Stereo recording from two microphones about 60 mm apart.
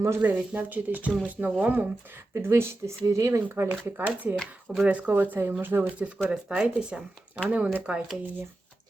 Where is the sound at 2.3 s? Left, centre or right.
Right.